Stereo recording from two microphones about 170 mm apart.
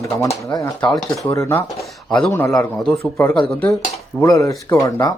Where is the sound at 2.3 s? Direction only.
15° left (ahead or behind).